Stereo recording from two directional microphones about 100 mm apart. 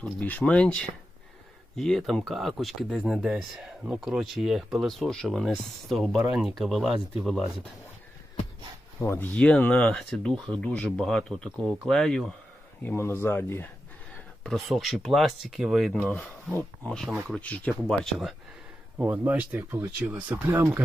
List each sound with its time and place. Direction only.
0.0 s speech: 15° left (ahead or behind); by 7.4 s centre (ahead or behind)
9.0 s speech: 20° left (ahead or behind)
12.8 s speech: 20° left (ahead or behind)
14.4 s speech: centre (ahead or behind)
16.6 s speech: 10° left (ahead or behind)
18.9 s speech: 20° right (ahead or behind)